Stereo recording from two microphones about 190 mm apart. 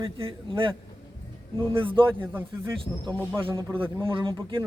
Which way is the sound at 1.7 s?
25° right (ahead or behind).